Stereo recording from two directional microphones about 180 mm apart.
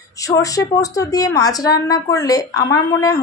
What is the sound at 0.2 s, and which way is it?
A woman's voice, 20° left (ahead or behind).